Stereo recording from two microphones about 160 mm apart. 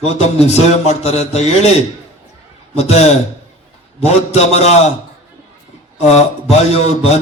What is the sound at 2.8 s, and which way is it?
A man's voice, 45° left (ahead or behind).